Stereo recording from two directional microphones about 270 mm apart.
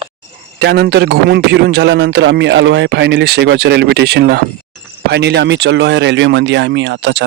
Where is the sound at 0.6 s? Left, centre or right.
Right.